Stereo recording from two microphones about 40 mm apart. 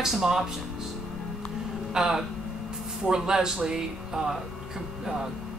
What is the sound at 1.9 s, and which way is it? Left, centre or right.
Speech, centre.